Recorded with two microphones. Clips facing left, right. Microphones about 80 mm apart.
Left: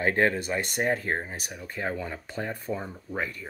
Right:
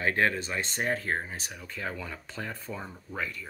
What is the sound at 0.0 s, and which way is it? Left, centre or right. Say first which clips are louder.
Speech: left 3 dB; left.